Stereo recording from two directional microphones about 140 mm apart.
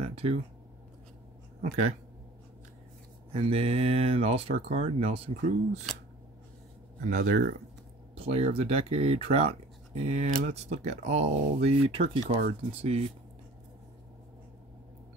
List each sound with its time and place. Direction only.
0.0 s a sound: 45° right (ahead or behind)
1.6 s speech: 55° right (ahead or behind)
3.3 s speech: 45° right (ahead or behind)
7.1 s speech: 70° right (ahead or behind)
8.1 s speech: 45° right (ahead or behind)